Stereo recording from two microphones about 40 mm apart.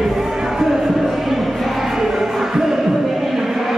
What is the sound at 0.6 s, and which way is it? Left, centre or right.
Music, centre.